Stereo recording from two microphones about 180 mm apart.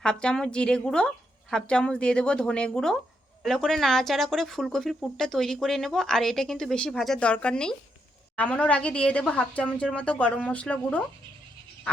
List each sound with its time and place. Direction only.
0.0 s a woman's voice: 5° left (ahead or behind)